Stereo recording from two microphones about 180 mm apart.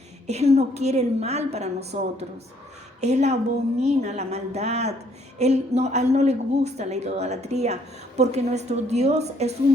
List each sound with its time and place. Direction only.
0.3 s a woman's voice: 35° right (ahead or behind)